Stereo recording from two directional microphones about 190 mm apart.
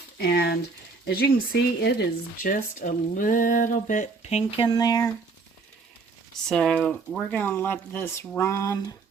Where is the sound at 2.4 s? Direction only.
45° left (ahead or behind); by 5.0 s 20° left (ahead or behind).